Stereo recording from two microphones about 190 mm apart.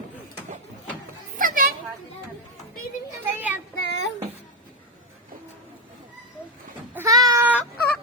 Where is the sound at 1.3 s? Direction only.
45° right (ahead or behind).